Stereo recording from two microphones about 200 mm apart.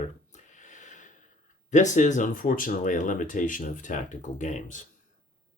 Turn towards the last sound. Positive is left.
turn(degrees=40)  # may be behind; listen again after turning